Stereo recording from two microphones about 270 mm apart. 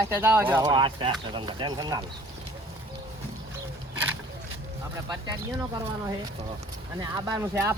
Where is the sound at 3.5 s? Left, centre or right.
Centre.